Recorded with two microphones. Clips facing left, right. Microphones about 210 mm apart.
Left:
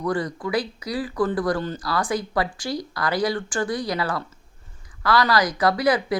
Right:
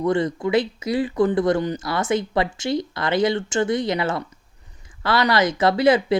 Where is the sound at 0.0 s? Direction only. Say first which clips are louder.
Right 5 dB; 25° right (ahead or behind).